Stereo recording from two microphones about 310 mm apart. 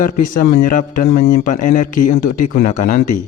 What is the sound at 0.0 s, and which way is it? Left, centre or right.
A man's voice, left.